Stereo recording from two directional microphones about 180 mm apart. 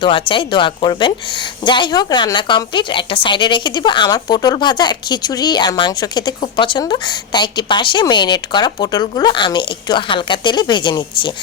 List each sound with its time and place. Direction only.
0.0 s a woman's voice: 30° left (ahead or behind)